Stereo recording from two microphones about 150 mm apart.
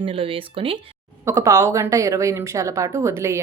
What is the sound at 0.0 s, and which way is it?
Speech, 35° right (ahead or behind).